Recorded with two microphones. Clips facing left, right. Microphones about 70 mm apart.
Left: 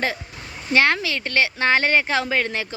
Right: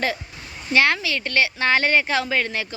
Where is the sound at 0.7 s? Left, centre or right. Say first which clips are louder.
Even; left.